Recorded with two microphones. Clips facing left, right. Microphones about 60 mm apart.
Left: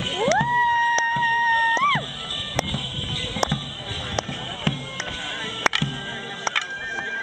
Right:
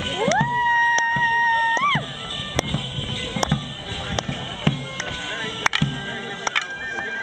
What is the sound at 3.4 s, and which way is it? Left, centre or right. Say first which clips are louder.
Music: right 1 dB; centre.